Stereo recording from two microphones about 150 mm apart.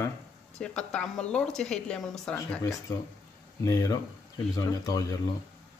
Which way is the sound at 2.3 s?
15° left (ahead or behind).